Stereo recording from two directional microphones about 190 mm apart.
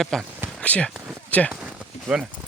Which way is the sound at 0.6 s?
5° left (ahead or behind).